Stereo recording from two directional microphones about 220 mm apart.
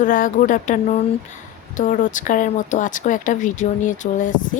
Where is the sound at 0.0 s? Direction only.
35° left (ahead or behind).